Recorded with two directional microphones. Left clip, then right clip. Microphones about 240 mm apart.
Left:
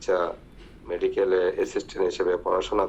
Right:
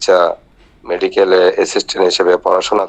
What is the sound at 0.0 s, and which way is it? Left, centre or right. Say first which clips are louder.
Speech: right 14 dB; right.